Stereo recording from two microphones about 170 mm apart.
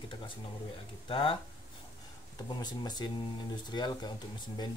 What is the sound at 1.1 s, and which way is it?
Speech, 30° left (ahead or behind).